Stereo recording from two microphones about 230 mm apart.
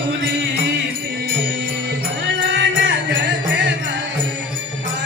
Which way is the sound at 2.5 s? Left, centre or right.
Right.